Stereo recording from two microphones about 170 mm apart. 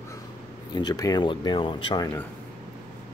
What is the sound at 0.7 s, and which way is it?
Speech, 25° left (ahead or behind).